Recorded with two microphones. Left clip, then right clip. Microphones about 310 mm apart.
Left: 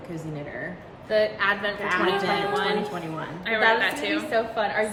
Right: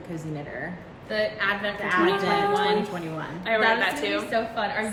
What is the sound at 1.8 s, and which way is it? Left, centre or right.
Speech, centre.